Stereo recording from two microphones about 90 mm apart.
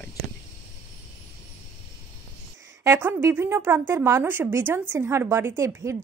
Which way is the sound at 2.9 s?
25° right (ahead or behind).